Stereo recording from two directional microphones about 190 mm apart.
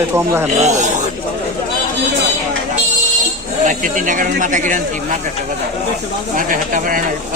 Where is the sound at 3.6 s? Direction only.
45° right (ahead or behind).